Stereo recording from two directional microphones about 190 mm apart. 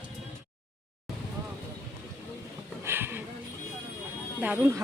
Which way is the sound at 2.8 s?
10° right (ahead or behind).